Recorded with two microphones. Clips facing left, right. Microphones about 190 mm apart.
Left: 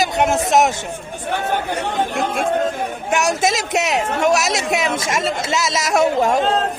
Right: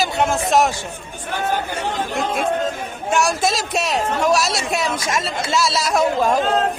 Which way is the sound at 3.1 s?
20° left (ahead or behind).